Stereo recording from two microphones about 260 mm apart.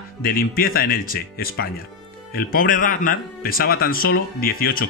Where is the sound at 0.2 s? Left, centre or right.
Left.